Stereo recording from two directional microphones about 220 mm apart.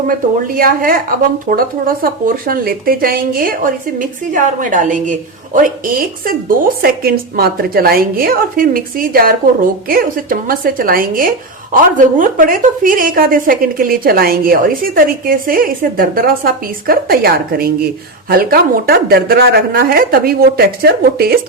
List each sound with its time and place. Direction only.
0.4 s a woman's voice: 40° right (ahead or behind)